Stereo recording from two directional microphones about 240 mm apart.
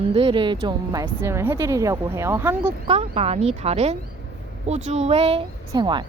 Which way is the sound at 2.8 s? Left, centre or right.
Right.